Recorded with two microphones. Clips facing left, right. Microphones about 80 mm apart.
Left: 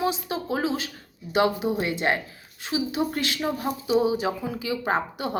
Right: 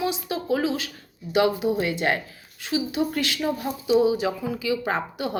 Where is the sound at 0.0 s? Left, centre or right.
Left.